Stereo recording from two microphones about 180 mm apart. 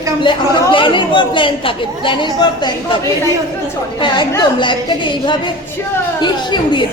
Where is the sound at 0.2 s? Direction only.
30° left (ahead or behind).